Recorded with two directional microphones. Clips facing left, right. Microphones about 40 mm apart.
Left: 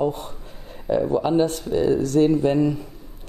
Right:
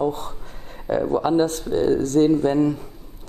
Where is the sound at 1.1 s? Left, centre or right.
Right.